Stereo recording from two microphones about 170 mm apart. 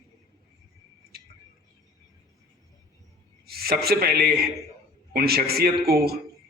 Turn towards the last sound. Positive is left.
turn(degrees=-65)  # may be behind; listen again after turning